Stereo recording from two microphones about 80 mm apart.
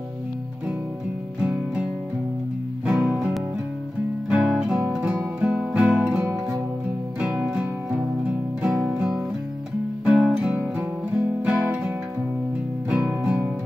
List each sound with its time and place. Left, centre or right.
1.4 s music: centre
10.0 s music: centre
10.8 s music: right
12.9 s music: centre